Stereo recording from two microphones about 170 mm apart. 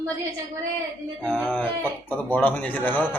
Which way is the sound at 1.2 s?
5° left (ahead or behind).